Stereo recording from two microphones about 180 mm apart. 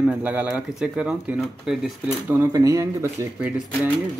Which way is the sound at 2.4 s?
20° right (ahead or behind).